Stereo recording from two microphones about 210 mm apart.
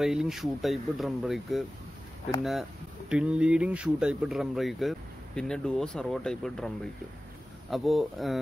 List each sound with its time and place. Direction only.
0.0 s speech: 5° right (ahead or behind)
3.1 s speech: 5° right (ahead or behind)
7.7 s speech: centre (ahead or behind)